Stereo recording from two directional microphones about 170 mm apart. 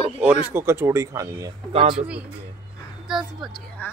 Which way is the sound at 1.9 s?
5° right (ahead or behind).